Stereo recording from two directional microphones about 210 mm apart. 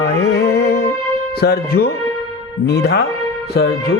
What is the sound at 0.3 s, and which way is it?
Music, 50° left (ahead or behind).